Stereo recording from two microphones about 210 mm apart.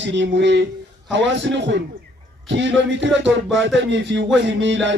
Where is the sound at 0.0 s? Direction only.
55° right (ahead or behind).